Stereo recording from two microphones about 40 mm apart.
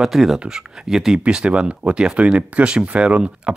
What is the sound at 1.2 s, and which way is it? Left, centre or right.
Speech, right.